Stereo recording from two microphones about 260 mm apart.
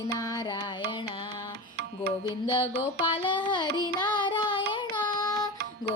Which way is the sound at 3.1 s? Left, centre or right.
Centre.